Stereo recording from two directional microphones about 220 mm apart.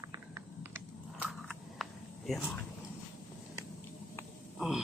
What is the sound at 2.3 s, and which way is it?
Speech, centre (ahead or behind).